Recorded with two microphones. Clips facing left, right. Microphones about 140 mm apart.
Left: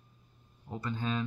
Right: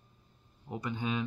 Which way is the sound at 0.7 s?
15° right (ahead or behind).